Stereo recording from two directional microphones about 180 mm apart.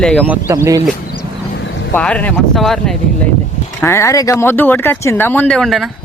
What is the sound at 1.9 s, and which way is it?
Speech, 5° left (ahead or behind).